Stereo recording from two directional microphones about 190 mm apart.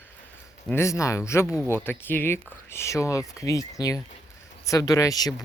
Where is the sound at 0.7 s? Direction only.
15° left (ahead or behind).